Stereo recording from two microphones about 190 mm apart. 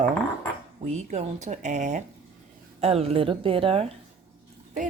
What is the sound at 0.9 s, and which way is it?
Speech, 35° right (ahead or behind).